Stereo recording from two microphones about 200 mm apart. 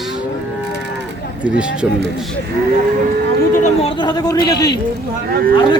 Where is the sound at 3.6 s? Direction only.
30° left (ahead or behind).